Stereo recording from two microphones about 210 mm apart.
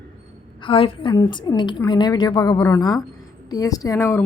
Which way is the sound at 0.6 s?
25° left (ahead or behind).